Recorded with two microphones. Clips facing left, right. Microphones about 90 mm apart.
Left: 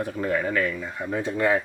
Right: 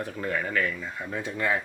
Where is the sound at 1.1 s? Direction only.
35° left (ahead or behind).